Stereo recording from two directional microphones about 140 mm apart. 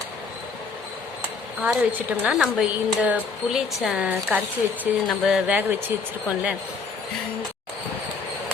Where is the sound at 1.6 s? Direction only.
10° right (ahead or behind).